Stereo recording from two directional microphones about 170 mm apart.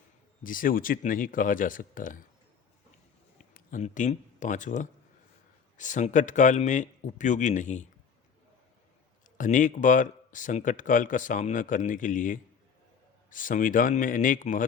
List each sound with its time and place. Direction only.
0.4 s speech: 55° left (ahead or behind)
3.5 s speech: 50° left (ahead or behind)
9.4 s speech: 50° left (ahead or behind)